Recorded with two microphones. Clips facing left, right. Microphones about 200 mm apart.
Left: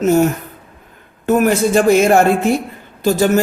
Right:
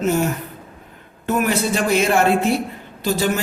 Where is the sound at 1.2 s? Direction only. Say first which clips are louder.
Left 6 dB; 45° left (ahead or behind).